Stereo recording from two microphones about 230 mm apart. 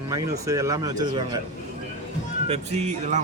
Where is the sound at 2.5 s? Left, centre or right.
Right.